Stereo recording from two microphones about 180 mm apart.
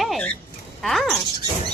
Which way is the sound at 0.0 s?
5° left (ahead or behind).